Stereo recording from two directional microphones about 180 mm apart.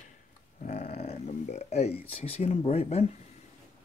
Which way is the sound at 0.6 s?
40° left (ahead or behind).